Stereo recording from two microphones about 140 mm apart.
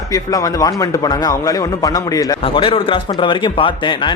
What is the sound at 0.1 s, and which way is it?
Speech, 25° left (ahead or behind).